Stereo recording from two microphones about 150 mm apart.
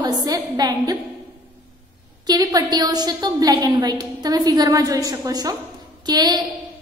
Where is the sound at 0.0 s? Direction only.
25° right (ahead or behind).